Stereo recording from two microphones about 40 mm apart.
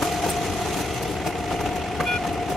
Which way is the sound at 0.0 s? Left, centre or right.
Centre.